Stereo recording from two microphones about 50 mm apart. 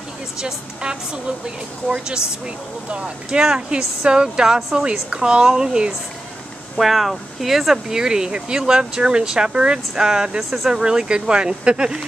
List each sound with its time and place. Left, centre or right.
0.4 s speech: centre
4.6 s a woman's voice: centre
5.1 s speech: centre